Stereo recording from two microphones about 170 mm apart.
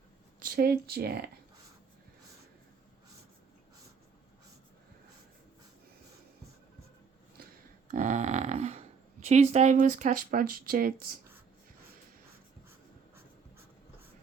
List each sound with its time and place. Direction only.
0.3 s speech: 60° right (ahead or behind)
7.9 s a sound: 45° right (ahead or behind)
9.2 s speech: 40° right (ahead or behind); by 11.1 s 60° right (ahead or behind)